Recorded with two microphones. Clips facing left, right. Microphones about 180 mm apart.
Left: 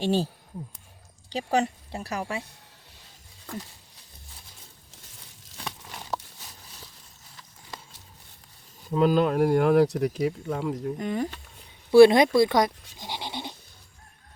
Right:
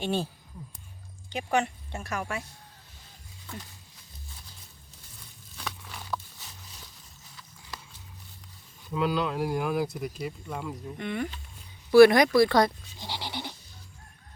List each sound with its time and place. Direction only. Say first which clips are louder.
0.0 s speech: left 4 dB; 35° left (ahead or behind)
1.3 s speech: left 2 dB; 35° left (ahead or behind)
8.9 s speech: left 6 dB; 40° left (ahead or behind); by 10.5 s 75° left (ahead or behind)
10.7 s speech: left 4 dB; 35° left (ahead or behind)
11.9 s speech: left 2 dB; 25° left (ahead or behind)